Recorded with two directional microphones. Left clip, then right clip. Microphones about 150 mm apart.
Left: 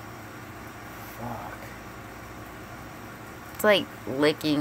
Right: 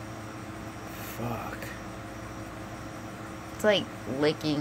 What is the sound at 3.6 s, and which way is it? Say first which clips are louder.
Speech: left 3 dB; 20° left (ahead or behind).